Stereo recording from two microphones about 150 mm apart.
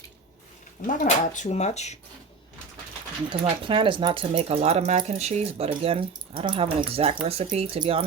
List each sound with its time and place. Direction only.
1.0 s speech: 50° left (ahead or behind)
3.2 s speech: 35° right (ahead or behind)